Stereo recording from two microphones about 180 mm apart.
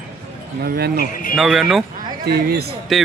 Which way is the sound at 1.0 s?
50° left (ahead or behind).